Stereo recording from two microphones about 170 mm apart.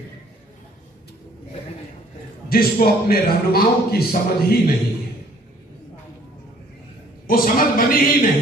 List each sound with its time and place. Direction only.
2.5 s a man's voice: 60° left (ahead or behind)
7.2 s a man's voice: 55° left (ahead or behind)